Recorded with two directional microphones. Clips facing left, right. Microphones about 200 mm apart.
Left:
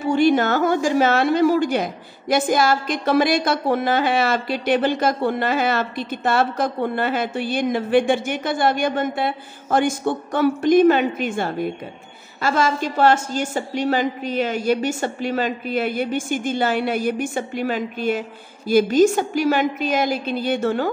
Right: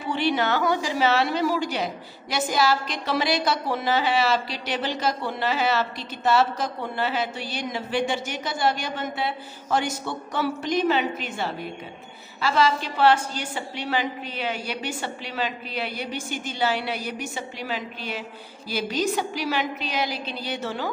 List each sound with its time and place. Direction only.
0.0 s a woman's voice: 45° left (ahead or behind)